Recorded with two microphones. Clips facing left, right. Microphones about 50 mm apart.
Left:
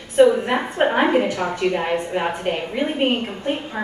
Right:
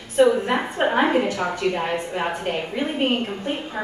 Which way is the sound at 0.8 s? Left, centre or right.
Centre.